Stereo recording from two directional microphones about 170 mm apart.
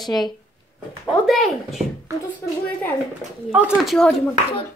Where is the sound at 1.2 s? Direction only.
Centre (ahead or behind).